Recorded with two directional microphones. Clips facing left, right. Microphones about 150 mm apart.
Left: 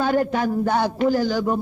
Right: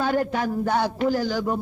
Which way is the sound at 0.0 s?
30° left (ahead or behind).